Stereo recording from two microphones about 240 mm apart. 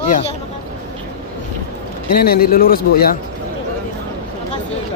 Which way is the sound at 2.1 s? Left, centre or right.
Left.